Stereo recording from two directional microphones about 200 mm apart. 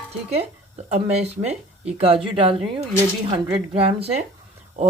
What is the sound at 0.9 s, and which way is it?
Speech, 35° right (ahead or behind).